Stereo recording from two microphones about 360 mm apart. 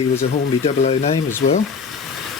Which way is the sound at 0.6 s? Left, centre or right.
Centre.